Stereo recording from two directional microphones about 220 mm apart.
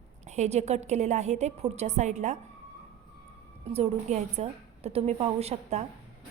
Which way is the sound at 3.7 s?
30° right (ahead or behind).